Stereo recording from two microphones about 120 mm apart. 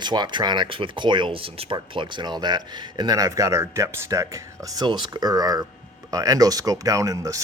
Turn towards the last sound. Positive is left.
turn(degrees=-30)  # may be behind; listen again after turning